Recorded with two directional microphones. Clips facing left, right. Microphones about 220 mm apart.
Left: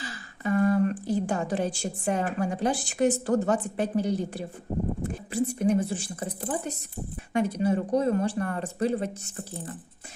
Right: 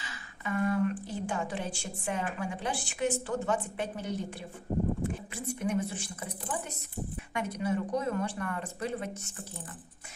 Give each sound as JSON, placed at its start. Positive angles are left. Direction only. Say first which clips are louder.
{"t": 0.0, "sound": "a woman's voice", "louder": "left 8 dB", "side_deg": 35}